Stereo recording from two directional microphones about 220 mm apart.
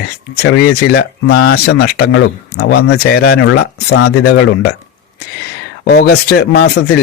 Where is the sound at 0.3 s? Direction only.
50° left (ahead or behind).